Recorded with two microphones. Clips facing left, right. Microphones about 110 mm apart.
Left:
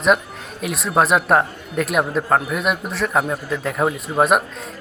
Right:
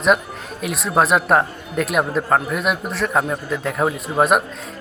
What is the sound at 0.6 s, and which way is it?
Speech, centre (ahead or behind).